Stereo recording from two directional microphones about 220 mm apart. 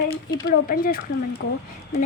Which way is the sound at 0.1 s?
50° left (ahead or behind).